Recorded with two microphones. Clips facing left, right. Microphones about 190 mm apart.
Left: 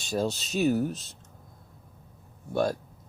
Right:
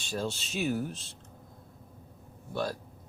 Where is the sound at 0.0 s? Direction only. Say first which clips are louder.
Left 5 dB; 40° left (ahead or behind).